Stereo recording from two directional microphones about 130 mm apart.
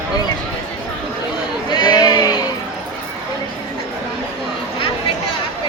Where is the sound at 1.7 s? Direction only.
35° left (ahead or behind).